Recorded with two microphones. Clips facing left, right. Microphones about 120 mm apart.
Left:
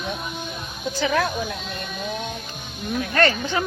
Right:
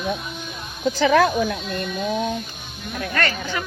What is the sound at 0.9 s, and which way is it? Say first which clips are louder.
Speech: right 6 dB; 90° right.